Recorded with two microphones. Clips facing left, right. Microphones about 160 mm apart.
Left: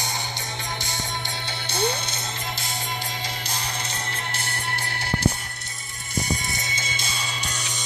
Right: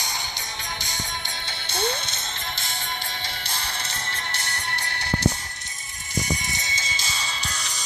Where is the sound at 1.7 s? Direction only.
25° right (ahead or behind).